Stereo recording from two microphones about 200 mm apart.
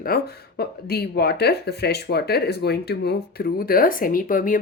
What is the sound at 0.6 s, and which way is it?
Speech, 50° left (ahead or behind).